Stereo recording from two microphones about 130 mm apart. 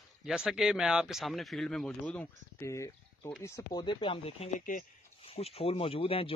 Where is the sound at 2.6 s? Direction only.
20° left (ahead or behind); by 4.4 s 50° left (ahead or behind).